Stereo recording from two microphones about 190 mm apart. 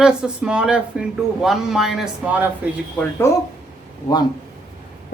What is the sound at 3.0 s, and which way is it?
Speech, 5° left (ahead or behind).